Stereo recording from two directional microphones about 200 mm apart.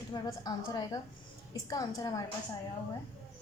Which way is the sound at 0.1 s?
20° left (ahead or behind).